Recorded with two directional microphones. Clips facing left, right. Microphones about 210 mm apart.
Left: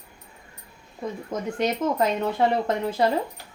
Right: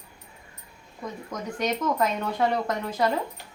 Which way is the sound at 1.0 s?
30° left (ahead or behind).